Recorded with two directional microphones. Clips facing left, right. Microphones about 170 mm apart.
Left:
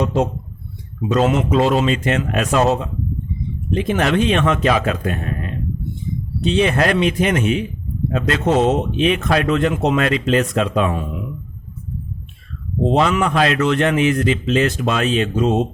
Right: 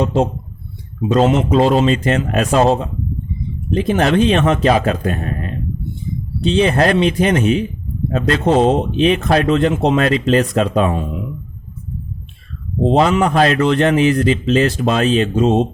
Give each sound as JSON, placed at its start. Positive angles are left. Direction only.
{"t": 0.0, "sound": "speech", "side_deg": -30}
{"t": 12.8, "sound": "speech", "side_deg": -35}